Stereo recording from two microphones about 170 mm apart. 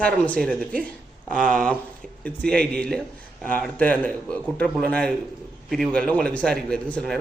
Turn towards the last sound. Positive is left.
turn(degrees=5)  # may be behind; listen again after turning